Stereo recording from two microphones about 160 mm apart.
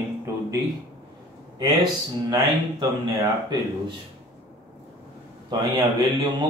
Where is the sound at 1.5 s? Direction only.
25° right (ahead or behind).